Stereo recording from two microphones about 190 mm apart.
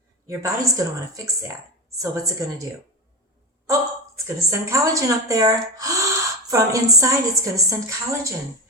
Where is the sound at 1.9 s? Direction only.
15° right (ahead or behind).